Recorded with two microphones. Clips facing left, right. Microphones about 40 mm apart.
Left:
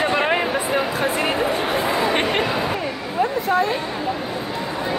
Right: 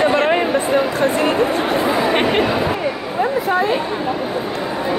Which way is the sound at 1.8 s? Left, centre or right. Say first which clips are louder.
Right 3 dB; centre.